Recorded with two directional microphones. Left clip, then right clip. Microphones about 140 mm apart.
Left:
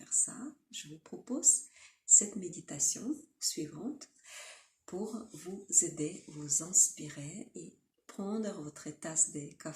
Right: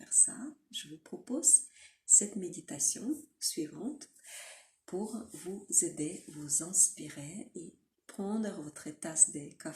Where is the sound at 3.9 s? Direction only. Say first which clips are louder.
Even; 15° left (ahead or behind).